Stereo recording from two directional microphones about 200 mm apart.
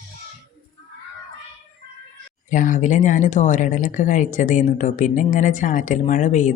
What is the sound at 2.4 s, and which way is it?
Speech, 40° left (ahead or behind).